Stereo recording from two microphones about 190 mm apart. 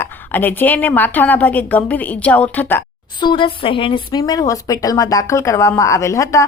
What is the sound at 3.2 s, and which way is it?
Speech, 25° left (ahead or behind).